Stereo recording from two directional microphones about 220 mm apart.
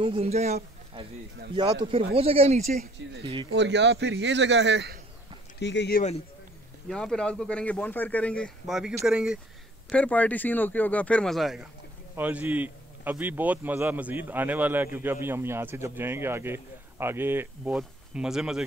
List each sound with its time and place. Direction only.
0.0 s a man's voice: 25° right (ahead or behind)
3.5 s a man's voice: 55° right (ahead or behind)
5.6 s speech: 50° left (ahead or behind)
6.9 s a man's voice: 5° left (ahead or behind)